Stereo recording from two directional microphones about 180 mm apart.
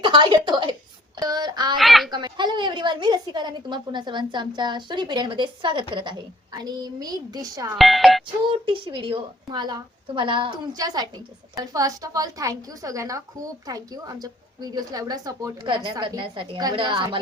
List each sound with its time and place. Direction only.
0.0 s a woman's voice: 25° right (ahead or behind)
1.1 s a sound: 25° right (ahead or behind)
1.7 s a child's voice: centre (ahead or behind)
2.1 s a woman's voice: 25° right (ahead or behind)
7.8 s a child's voice: centre (ahead or behind)
8.4 s a woman's voice: 30° right (ahead or behind)